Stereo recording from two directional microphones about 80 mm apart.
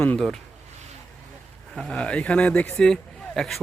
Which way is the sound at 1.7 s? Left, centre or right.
Centre.